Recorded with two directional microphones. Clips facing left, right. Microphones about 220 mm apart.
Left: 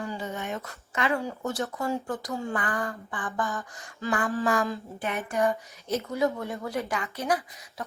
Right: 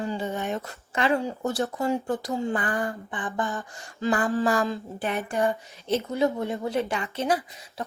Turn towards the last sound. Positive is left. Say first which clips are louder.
# right 2 dB
turn(degrees=-25)  # may be behind; listen again after turning